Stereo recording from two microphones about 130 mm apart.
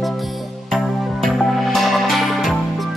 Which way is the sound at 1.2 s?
Centre (ahead or behind).